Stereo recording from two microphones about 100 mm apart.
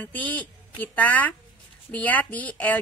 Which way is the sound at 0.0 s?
15° left (ahead or behind).